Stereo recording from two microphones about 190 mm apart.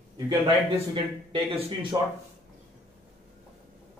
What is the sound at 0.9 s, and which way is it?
Speech, 25° right (ahead or behind).